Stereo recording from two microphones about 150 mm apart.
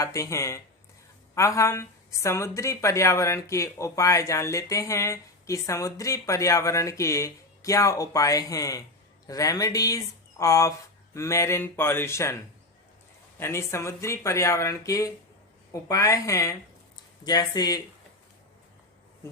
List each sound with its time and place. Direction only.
0.0 s speech: 20° left (ahead or behind)
13.4 s speech: 20° left (ahead or behind)